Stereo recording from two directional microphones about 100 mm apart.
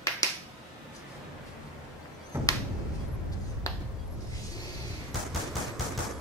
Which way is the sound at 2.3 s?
25° right (ahead or behind).